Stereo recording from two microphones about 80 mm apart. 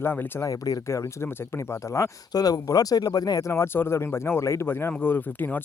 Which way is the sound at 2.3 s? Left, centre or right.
Left.